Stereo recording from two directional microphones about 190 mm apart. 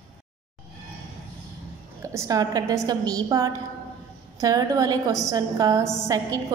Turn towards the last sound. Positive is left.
turn(degrees=-20)  # may be behind; listen again after turning